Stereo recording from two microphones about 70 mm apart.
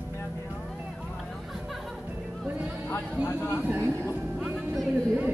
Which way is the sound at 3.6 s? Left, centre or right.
Right.